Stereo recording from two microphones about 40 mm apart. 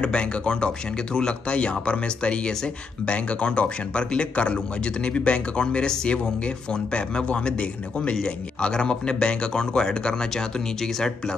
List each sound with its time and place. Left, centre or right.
0.0 s speech: left